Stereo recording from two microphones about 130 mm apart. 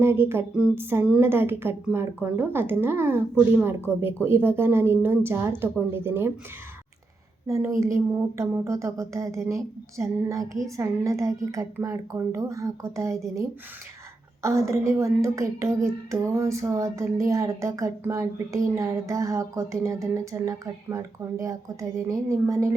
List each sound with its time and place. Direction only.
0.0 s a woman's voice: 20° right (ahead or behind)
7.4 s a woman's voice: 25° right (ahead or behind)